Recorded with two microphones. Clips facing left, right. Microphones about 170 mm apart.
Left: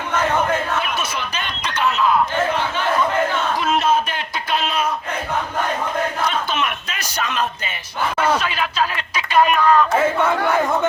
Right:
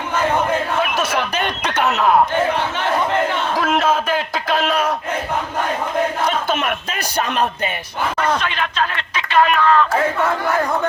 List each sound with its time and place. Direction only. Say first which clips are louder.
0.9 s a sound: right 6 dB; 65° right (ahead or behind)
3.5 s crowd: right 1 dB; 90° right
4.7 s battle cry: right 3 dB; 75° right (ahead or behind)
6.5 s a sound: right 3 dB; 50° right (ahead or behind)
7.2 s speech: right 3 dB; 60° right (ahead or behind)
8.2 s speech: left 1 dB; 5° left (ahead or behind)
9.9 s speech: left 1 dB; centre (ahead or behind)